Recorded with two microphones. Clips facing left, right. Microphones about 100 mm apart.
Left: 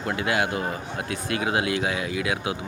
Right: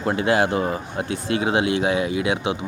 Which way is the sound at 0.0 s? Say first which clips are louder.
Right 5 dB; 30° right (ahead or behind).